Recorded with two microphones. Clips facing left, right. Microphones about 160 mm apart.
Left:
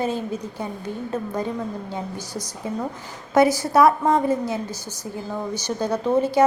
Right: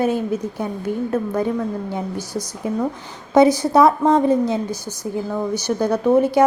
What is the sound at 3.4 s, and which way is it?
A woman's voice, 20° right (ahead or behind).